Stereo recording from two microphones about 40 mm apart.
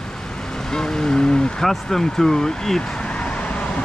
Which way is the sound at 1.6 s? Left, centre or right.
Centre.